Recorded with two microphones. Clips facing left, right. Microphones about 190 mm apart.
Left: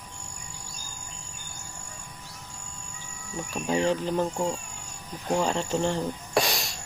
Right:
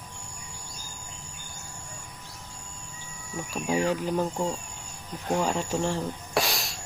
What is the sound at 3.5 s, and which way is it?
Speech, 10° right (ahead or behind).